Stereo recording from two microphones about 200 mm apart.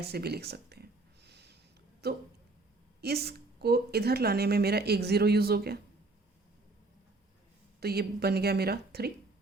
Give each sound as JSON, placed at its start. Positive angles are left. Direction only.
{"t": 0.0, "sound": "a sound", "side_deg": -55}
{"t": 2.0, "sound": "a woman's voice", "side_deg": -55}
{"t": 7.8, "sound": "a woman's voice", "side_deg": -50}